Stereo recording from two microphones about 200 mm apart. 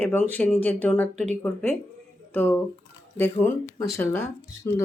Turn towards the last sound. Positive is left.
turn(degrees=10)  # may be behind; listen again after turning